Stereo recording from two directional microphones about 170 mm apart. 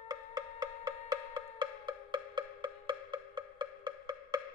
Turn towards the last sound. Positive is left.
turn(degrees=-25)  # may be behind; listen again after turning